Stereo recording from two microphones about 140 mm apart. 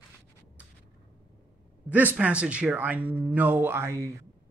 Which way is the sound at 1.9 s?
10° right (ahead or behind).